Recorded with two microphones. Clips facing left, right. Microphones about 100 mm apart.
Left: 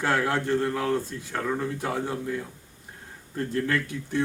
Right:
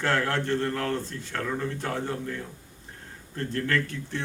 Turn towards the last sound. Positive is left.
turn(degrees=15)  # may be behind; listen again after turning